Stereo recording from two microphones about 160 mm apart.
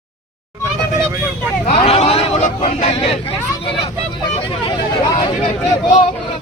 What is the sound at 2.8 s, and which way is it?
Vehicle, 35° left (ahead or behind).